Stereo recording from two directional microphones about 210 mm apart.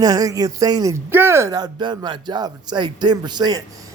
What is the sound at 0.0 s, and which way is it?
Speech, 15° right (ahead or behind).